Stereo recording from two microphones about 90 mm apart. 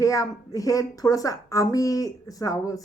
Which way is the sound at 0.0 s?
40° left (ahead or behind).